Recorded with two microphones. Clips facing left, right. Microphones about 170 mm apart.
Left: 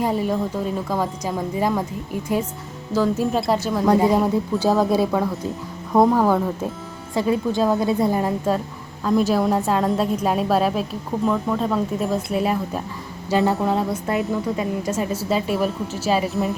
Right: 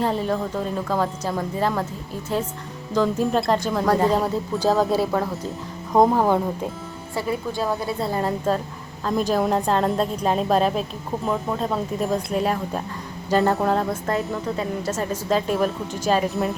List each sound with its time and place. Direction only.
0.0 s a woman's voice: 10° left (ahead or behind)
2.9 s a woman's voice: 5° left (ahead or behind)
4.9 s a woman's voice: 15° left (ahead or behind)
5.9 s speech: 15° right (ahead or behind)
7.2 s a woman's voice: 20° left (ahead or behind)